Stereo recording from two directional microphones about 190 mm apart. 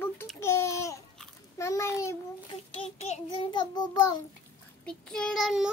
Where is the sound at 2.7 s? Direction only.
30° left (ahead or behind).